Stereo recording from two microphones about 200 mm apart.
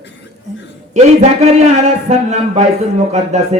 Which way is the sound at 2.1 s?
35° right (ahead or behind).